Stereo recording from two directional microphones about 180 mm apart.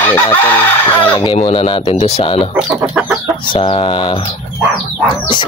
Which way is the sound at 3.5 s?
25° left (ahead or behind).